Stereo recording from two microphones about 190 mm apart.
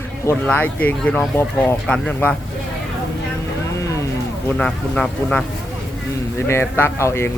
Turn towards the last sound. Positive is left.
turn(degrees=15)  # may be behind; listen again after turning